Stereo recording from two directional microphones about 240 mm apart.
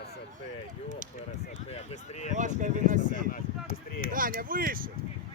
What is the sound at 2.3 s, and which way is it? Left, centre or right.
Speech, right.